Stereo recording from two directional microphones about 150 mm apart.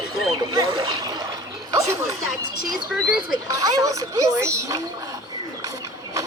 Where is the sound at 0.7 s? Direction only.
30° right (ahead or behind).